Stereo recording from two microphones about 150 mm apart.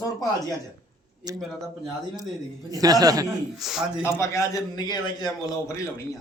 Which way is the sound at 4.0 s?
20° left (ahead or behind).